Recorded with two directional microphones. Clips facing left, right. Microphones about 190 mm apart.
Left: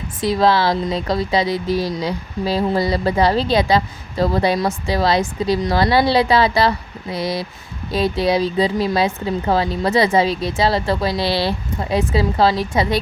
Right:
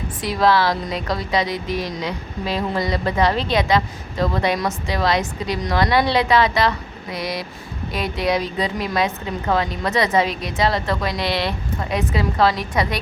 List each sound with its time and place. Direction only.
0.2 s speech: 25° left (ahead or behind)